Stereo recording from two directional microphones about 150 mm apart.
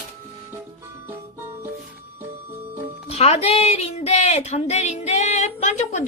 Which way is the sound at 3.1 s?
40° left (ahead or behind).